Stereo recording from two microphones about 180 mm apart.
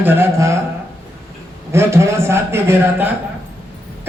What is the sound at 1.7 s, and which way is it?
A man's voice, 15° right (ahead or behind).